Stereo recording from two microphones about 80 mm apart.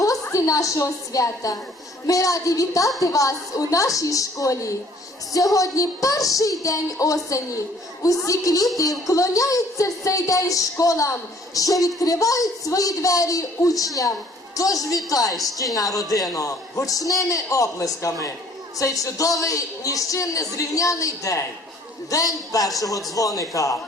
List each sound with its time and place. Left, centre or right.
0.0 s a woman's voice: left